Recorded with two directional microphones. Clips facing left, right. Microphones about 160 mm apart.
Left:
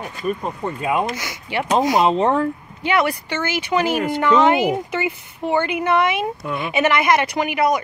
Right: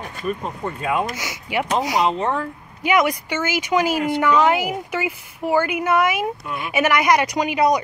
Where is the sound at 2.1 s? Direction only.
25° left (ahead or behind).